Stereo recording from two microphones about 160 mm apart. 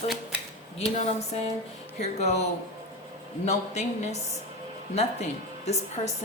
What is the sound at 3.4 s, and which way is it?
Speech, 45° left (ahead or behind).